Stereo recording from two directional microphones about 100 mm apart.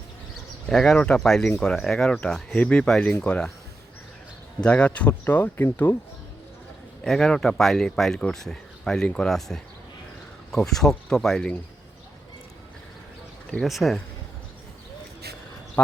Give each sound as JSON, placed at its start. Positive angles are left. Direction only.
{"t": 0.7, "sound": "speech", "side_deg": 5}
{"t": 4.6, "sound": "speech", "side_deg": 10}
{"t": 7.0, "sound": "speech", "side_deg": 5}
{"t": 13.5, "sound": "speech", "side_deg": 0}